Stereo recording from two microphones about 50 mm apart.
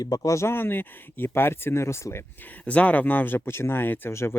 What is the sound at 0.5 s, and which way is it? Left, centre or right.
Speech, left.